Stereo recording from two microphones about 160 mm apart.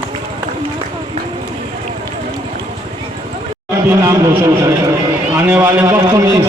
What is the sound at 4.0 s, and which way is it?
Speech, 15° right (ahead or behind).